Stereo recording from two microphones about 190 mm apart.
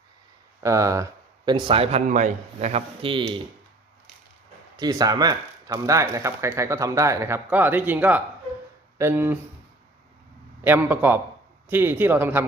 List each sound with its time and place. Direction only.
0.6 s a man's voice: 15° right (ahead or behind)
4.8 s speech: 20° right (ahead or behind)
10.6 s speech: 10° right (ahead or behind)